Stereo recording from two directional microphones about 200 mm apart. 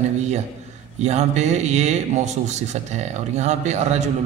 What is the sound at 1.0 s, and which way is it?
A man's voice, 35° right (ahead or behind).